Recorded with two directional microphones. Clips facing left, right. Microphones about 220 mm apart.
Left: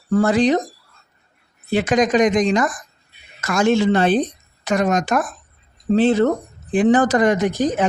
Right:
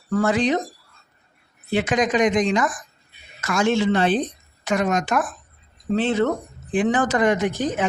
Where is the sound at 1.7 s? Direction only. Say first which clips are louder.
Left 4 dB; 40° left (ahead or behind).